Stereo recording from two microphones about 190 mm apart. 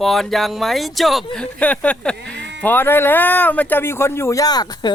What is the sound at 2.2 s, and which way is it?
Sheep, 5° left (ahead or behind).